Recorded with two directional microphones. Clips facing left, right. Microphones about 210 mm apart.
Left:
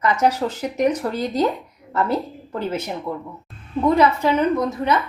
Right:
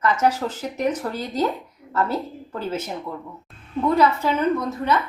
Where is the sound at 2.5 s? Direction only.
10° left (ahead or behind).